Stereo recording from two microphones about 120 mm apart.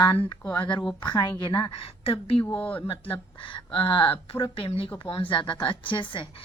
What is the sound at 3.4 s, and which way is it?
Speech, 45° left (ahead or behind).